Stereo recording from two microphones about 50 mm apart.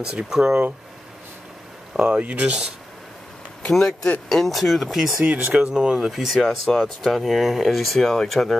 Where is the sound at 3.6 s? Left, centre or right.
Centre.